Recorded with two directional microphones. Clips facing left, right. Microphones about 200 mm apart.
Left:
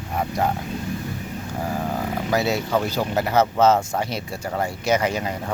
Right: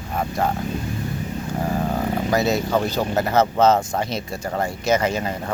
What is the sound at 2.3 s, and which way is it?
Speech, 10° left (ahead or behind).